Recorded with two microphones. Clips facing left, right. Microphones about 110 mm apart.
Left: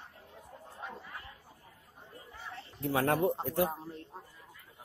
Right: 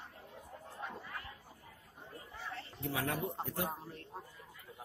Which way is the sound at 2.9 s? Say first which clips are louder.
Left 9 dB; 50° left (ahead or behind).